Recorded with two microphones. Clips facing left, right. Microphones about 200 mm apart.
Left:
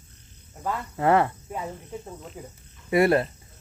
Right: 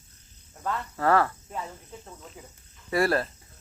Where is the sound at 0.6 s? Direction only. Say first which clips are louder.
Left 2 dB; 20° left (ahead or behind).